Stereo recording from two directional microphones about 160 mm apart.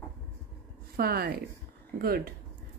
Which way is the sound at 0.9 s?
75° right (ahead or behind).